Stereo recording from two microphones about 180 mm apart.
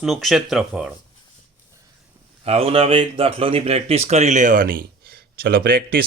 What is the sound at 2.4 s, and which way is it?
Speech, 35° right (ahead or behind).